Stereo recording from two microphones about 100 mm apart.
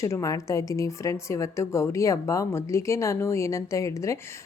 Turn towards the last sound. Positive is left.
turn(degrees=30)  # may be behind; listen again after turning